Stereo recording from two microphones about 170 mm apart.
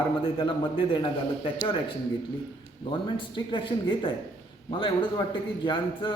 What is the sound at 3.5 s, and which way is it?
Speech, 30° left (ahead or behind).